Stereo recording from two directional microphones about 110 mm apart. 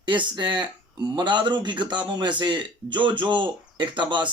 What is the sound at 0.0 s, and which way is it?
A man's voice, 45° right (ahead or behind).